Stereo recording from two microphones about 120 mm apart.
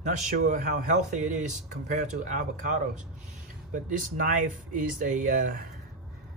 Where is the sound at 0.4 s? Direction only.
90° right.